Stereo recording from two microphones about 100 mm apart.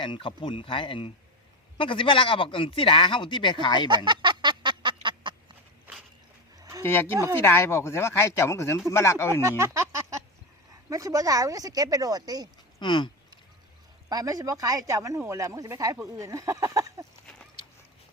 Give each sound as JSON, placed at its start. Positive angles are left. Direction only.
{"t": 0.0, "sound": "speech", "side_deg": 55}
{"t": 3.8, "sound": "a sound", "side_deg": -50}
{"t": 6.6, "sound": "a sound", "side_deg": -35}
{"t": 6.8, "sound": "speech", "side_deg": 20}
{"t": 9.4, "sound": "speech", "side_deg": -30}
{"t": 12.8, "sound": "speech", "side_deg": 50}
{"t": 14.1, "sound": "speech", "side_deg": -40}